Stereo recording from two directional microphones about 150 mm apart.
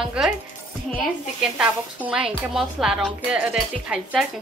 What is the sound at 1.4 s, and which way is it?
Speech, 5° right (ahead or behind).